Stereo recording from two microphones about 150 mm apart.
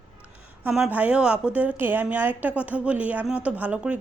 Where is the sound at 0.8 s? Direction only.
10° right (ahead or behind).